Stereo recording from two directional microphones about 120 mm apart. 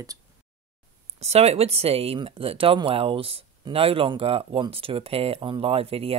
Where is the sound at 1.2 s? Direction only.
60° right (ahead or behind).